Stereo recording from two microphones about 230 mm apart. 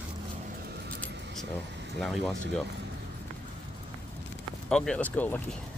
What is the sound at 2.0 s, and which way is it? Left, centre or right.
Speech, centre.